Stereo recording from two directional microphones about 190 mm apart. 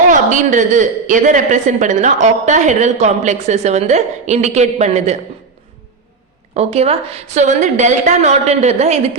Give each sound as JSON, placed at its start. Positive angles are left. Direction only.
{"t": 0.1, "sound": "a woman's voice", "side_deg": -40}
{"t": 6.5, "sound": "a woman's voice", "side_deg": -35}